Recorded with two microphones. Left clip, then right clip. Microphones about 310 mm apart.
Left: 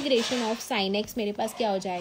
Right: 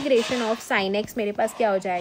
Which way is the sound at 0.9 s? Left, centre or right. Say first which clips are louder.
Right 4 dB; centre.